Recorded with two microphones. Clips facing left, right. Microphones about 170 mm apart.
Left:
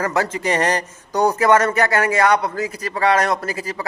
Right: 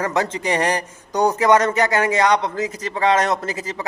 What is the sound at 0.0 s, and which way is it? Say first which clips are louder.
A man's voice: left 1 dB; 20° right (ahead or behind).